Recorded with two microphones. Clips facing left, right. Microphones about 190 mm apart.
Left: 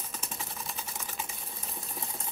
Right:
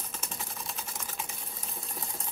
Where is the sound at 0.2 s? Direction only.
Centre (ahead or behind).